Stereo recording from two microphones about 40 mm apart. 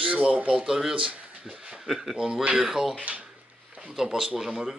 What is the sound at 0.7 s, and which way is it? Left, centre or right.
Speech, centre.